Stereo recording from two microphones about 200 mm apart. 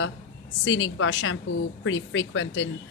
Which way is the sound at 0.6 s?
70° left (ahead or behind).